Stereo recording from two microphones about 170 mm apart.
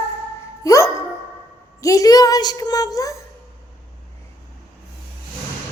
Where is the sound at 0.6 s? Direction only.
20° left (ahead or behind).